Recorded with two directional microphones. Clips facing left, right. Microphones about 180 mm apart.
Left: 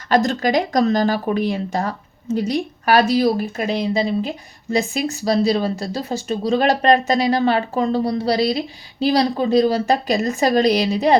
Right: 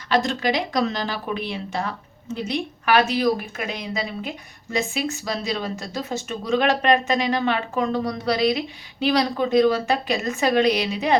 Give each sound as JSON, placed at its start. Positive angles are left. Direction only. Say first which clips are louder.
{"t": 0.1, "sound": "speech", "louder": "left 5 dB", "side_deg": 40}